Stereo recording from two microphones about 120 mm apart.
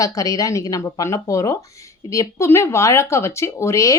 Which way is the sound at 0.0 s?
25° left (ahead or behind).